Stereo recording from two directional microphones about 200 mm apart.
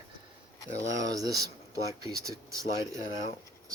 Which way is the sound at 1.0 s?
20° right (ahead or behind).